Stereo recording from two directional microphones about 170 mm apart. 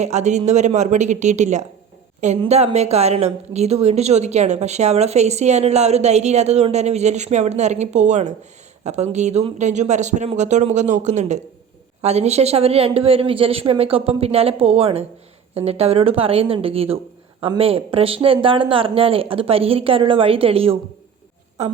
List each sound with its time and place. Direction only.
0.0 s speech: 40° right (ahead or behind)